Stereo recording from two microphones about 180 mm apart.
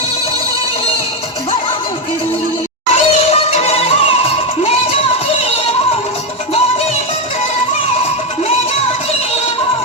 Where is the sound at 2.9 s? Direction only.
35° left (ahead or behind).